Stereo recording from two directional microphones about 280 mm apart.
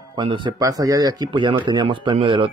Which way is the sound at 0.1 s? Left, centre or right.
Centre.